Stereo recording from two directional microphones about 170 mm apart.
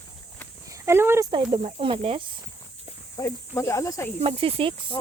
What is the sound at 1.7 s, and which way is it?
Speech, 35° right (ahead or behind).